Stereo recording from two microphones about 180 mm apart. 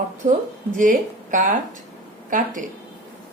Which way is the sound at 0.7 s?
45° right (ahead or behind).